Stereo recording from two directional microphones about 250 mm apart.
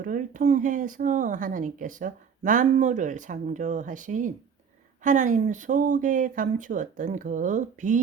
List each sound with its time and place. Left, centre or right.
0.0 s speech: right